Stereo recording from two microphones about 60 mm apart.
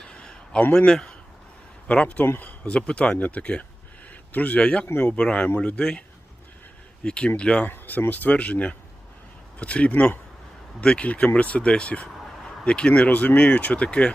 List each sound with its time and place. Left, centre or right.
0.0 s a sound: centre
0.7 s speech: centre
1.9 s speech: left
4.9 s speech: left
5.1 s speech: centre
7.0 s speech: centre
7.7 s speech: left